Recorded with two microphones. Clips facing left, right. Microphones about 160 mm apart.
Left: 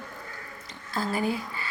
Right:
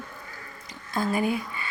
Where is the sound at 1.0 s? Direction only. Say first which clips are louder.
Right 2 dB; 20° right (ahead or behind).